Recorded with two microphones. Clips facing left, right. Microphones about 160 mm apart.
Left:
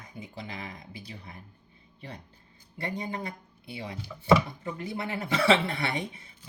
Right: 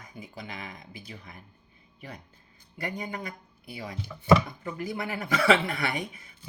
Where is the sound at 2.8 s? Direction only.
30° left (ahead or behind).